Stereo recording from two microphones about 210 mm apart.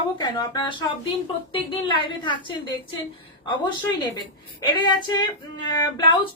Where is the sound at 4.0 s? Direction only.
20° left (ahead or behind).